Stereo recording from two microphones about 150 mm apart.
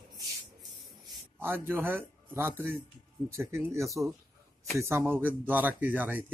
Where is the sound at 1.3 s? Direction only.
15° right (ahead or behind).